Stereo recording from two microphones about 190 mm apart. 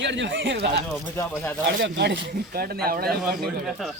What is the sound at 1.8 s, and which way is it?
Speech, 70° right (ahead or behind).